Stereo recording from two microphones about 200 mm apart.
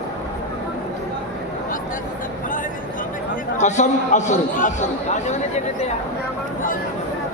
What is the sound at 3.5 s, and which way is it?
A man's voice, 35° left (ahead or behind).